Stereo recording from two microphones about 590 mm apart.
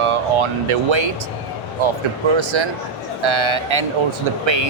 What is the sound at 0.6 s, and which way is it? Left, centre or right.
Speech, right.